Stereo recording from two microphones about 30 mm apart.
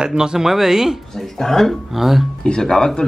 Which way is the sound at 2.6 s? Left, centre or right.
Left.